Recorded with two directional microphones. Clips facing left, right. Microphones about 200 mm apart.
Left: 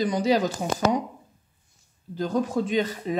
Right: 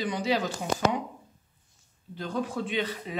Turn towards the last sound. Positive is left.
turn(degrees=45)  # may be behind; listen again after turning